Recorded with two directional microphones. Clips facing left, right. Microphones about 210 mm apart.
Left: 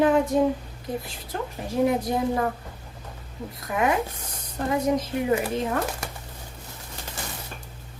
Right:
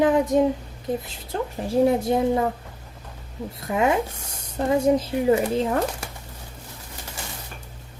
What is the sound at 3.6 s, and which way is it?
A woman's voice, 25° right (ahead or behind).